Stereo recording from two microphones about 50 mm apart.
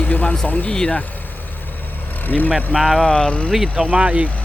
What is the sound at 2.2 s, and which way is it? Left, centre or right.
Speech, left.